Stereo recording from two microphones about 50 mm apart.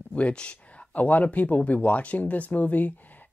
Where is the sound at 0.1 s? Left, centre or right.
Left.